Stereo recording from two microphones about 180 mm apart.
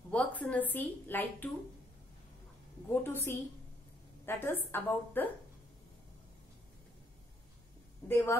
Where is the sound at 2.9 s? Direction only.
15° left (ahead or behind).